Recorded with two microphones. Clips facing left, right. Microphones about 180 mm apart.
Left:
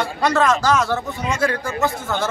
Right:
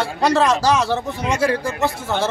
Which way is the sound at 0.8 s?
30° right (ahead or behind).